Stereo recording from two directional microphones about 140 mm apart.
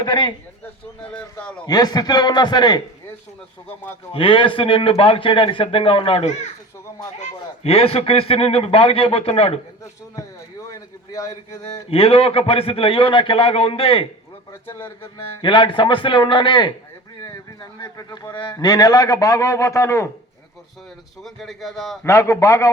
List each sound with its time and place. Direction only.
0.0 s speech: 35° left (ahead or behind)
1.1 s a man's voice: 10° left (ahead or behind)
1.6 s a man's voice: 30° left (ahead or behind)
4.1 s speech: 40° left (ahead or behind)
7.6 s a man's voice: 45° left (ahead or behind)
11.6 s a man's voice: 45° left (ahead or behind)
14.8 s a man's voice: 20° left (ahead or behind)
15.4 s a man's voice: 35° left (ahead or behind); by 20.1 s 20° left (ahead or behind)
21.2 s a man's voice: centre (ahead or behind)
22.0 s a man's voice: 20° left (ahead or behind)